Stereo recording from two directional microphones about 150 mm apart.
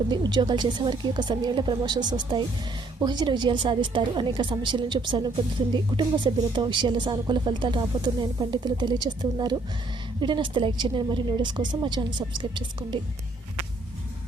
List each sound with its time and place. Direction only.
0.1 s a woman's voice: 30° right (ahead or behind)